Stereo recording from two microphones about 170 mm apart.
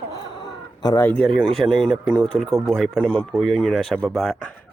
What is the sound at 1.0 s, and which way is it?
Speech, 5° left (ahead or behind).